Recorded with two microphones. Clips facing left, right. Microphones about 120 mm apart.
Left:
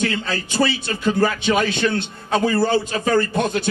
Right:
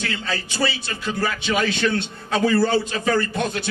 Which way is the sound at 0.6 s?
40° left (ahead or behind).